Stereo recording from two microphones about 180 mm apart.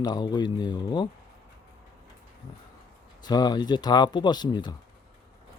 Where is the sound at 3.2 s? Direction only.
20° left (ahead or behind).